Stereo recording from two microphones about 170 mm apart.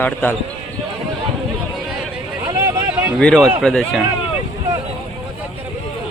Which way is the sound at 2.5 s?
15° right (ahead or behind).